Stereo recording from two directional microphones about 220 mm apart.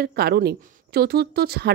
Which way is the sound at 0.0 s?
45° right (ahead or behind).